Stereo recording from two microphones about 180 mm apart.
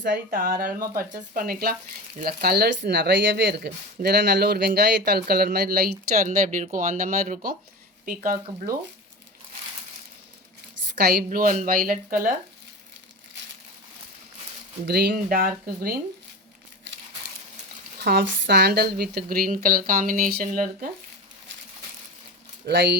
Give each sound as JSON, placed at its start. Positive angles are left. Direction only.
{"t": 0.3, "sound": "a woman's voice", "side_deg": -50}
{"t": 10.9, "sound": "a woman's voice", "side_deg": -60}
{"t": 14.8, "sound": "speech", "side_deg": -60}
{"t": 18.0, "sound": "speech", "side_deg": -65}
{"t": 19.4, "sound": "a woman's voice", "side_deg": -50}
{"t": 22.6, "sound": "speech", "side_deg": -65}